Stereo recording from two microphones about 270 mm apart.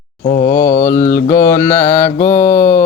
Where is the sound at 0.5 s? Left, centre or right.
Centre.